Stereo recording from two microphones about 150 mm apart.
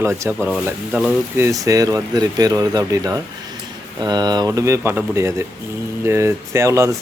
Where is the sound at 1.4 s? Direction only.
20° right (ahead or behind).